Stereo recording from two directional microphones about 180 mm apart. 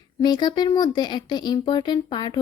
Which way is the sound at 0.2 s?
25° left (ahead or behind).